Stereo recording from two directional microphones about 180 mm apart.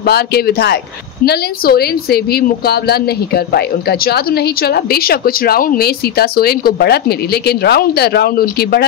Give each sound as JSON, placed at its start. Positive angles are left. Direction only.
{"t": 0.0, "sound": "a woman's voice", "side_deg": 60}